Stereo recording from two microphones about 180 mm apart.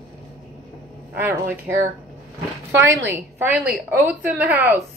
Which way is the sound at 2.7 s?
15° right (ahead or behind).